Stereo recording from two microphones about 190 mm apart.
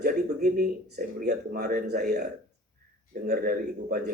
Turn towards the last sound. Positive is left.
turn(degrees=-50)  # may be behind; listen again after turning